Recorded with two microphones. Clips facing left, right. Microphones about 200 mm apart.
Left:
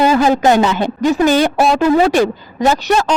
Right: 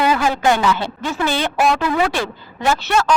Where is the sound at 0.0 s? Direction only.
30° left (ahead or behind).